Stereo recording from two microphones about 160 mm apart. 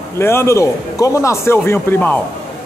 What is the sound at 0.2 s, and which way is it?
A man's voice, 15° left (ahead or behind).